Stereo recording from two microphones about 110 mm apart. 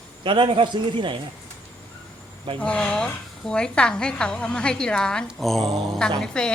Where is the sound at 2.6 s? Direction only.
10° left (ahead or behind).